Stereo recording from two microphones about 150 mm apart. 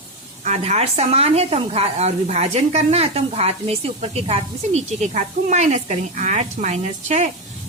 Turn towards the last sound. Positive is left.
turn(degrees=-50)  # may be behind; listen again after turning